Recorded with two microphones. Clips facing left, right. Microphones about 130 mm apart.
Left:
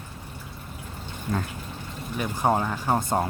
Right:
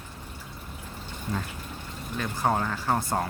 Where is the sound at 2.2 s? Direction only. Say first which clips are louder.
Left 3 dB; 15° left (ahead or behind).